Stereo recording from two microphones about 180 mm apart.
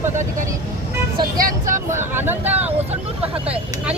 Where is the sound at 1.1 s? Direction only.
50° right (ahead or behind).